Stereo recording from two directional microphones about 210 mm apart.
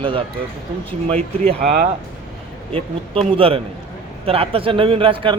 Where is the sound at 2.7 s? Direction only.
25° right (ahead or behind).